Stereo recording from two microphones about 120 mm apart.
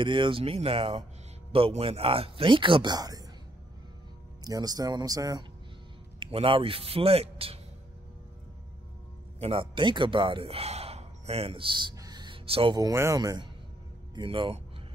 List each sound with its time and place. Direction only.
0.0 s speech: 45° right (ahead or behind)
4.5 s speech: 30° right (ahead or behind)
6.1 s speech: 45° right (ahead or behind)
9.4 s speech: 50° right (ahead or behind)
11.9 s music: 30° right (ahead or behind)
12.4 s speech: 50° right (ahead or behind)
12.9 s speech: 25° right (ahead or behind)
14.1 s speech: 45° right (ahead or behind)